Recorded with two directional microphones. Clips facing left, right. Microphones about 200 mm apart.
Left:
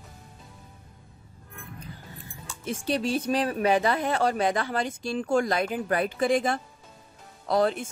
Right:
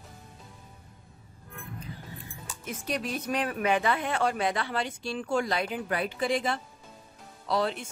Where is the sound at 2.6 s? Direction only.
30° left (ahead or behind); by 7.8 s 50° left (ahead or behind).